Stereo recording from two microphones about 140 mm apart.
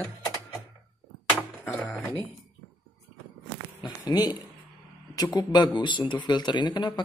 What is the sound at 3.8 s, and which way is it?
Speech, 30° left (ahead or behind).